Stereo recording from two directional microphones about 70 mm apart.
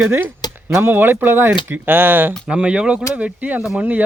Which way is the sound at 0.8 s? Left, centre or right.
Right.